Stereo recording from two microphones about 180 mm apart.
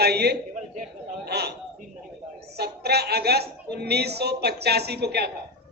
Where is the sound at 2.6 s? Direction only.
65° right (ahead or behind).